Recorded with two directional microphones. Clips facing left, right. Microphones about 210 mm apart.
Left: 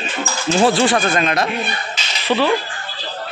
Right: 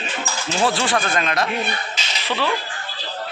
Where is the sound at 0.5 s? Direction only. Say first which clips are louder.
Left 6 dB; 20° left (ahead or behind).